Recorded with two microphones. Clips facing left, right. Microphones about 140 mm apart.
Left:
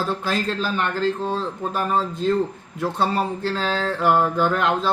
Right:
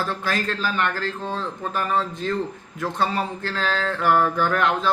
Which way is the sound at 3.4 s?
25° left (ahead or behind).